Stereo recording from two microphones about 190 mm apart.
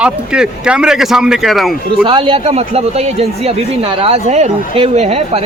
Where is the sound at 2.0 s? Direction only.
25° right (ahead or behind).